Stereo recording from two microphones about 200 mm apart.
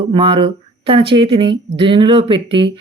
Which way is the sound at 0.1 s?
25° right (ahead or behind).